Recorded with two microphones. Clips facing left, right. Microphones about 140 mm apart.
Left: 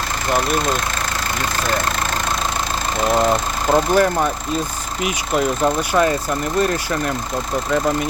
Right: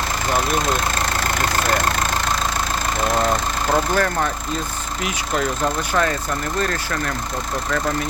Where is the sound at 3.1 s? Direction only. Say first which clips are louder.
Left 3 dB; 15° left (ahead or behind).